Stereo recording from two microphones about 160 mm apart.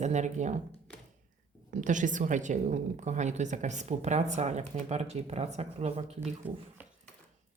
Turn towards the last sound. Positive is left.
turn(degrees=-10)  # may be behind; listen again after turning